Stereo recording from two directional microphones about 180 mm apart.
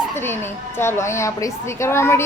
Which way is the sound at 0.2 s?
15° left (ahead or behind).